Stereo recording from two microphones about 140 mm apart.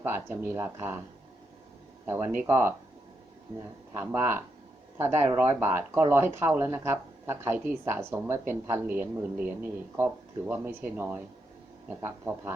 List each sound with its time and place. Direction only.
0.0 s speech: 15° right (ahead or behind)
2.0 s speech: 15° right (ahead or behind)
3.9 s speech: 15° right (ahead or behind)